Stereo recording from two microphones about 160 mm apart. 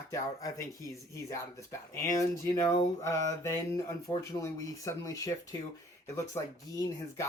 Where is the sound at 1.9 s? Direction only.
20° left (ahead or behind).